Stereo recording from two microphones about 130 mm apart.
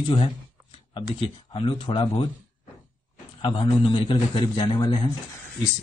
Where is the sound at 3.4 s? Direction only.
40° left (ahead or behind).